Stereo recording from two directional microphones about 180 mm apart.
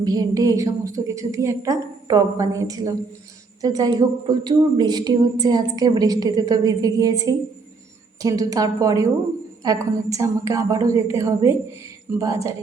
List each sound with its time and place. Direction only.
0.0 s a woman's voice: 20° right (ahead or behind)